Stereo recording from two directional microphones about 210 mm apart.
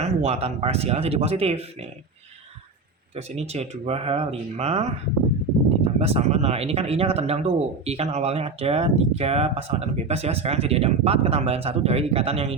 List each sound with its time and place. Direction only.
0.0 s speech: 30° right (ahead or behind)
3.2 s speech: 30° right (ahead or behind)